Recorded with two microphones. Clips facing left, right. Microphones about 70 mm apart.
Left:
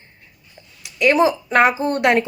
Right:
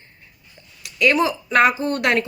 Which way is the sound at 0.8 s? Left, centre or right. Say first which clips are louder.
Left 3 dB; left.